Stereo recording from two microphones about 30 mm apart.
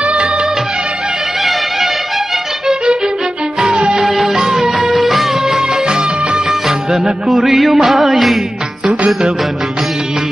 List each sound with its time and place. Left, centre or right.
0.0 s music of bollywood: right
2.7 s music: right
3.6 s music of bollywood: right
4.0 s music: centre
5.5 s music: right
7.2 s music: centre